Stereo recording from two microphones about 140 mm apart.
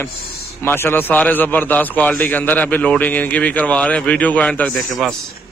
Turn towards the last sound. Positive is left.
turn(degrees=0)  # may be behind; listen again after turning